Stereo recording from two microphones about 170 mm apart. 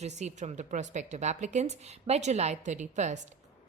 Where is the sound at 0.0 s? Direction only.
40° right (ahead or behind).